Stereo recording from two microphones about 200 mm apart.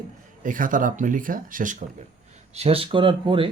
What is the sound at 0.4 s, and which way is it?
Speech, 40° right (ahead or behind).